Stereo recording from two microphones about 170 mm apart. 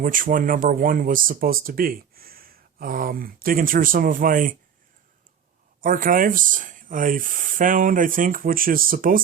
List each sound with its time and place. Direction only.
0.0 s speech: 50° right (ahead or behind)
5.8 s speech: 55° right (ahead or behind)